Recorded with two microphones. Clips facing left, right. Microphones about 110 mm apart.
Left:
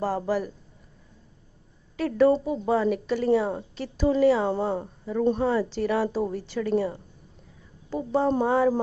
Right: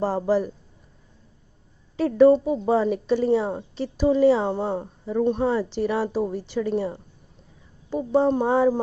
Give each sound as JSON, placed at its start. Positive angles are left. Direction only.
{"t": 0.0, "sound": "a woman's voice", "side_deg": -25}
{"t": 2.0, "sound": "a woman's voice", "side_deg": -20}